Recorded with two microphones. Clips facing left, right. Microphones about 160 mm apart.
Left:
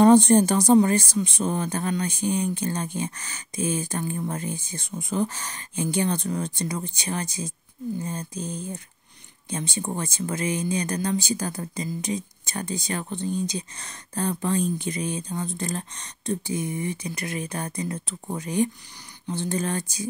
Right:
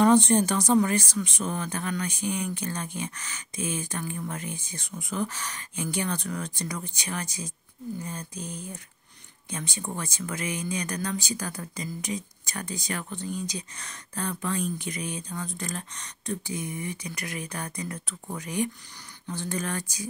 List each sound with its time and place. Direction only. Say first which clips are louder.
0.0 s speech: left 5 dB; 35° left (ahead or behind)